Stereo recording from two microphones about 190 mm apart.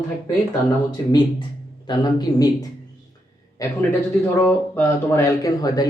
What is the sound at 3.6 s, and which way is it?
Speech, 20° left (ahead or behind).